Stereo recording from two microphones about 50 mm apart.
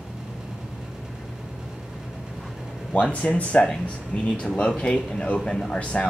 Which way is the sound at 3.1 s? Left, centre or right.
Left.